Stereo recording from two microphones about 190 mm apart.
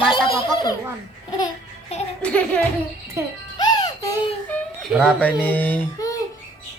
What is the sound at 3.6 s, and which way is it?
Music, 20° left (ahead or behind).